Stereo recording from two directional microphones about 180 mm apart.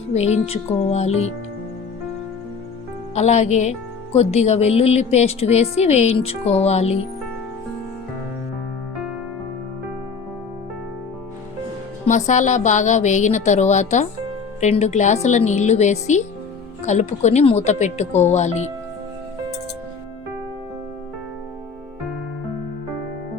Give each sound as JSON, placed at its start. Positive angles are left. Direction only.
{"t": 0.1, "sound": "a woman's voice", "side_deg": 35}
{"t": 3.2, "sound": "a woman's voice", "side_deg": 40}
{"t": 12.0, "sound": "a woman's voice", "side_deg": 40}